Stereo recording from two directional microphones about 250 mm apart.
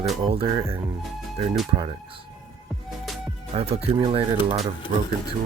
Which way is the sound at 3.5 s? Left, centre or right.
Right.